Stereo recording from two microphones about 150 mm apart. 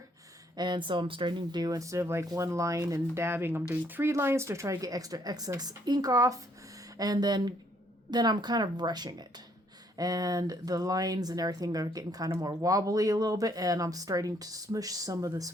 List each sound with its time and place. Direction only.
0.5 s speech: 30° right (ahead or behind)